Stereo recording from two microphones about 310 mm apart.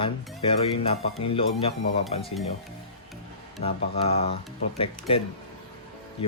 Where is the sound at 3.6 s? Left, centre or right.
Centre.